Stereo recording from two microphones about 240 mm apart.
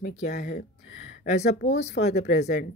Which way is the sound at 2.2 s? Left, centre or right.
Left.